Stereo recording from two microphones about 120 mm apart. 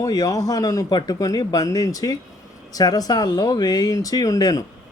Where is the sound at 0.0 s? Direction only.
30° left (ahead or behind).